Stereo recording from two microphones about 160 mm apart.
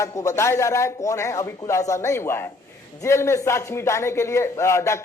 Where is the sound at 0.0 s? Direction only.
20° left (ahead or behind).